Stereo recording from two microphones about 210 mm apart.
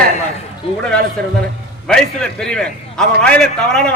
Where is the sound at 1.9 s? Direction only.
5° left (ahead or behind).